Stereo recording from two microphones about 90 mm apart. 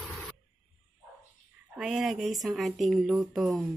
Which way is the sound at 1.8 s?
5° right (ahead or behind).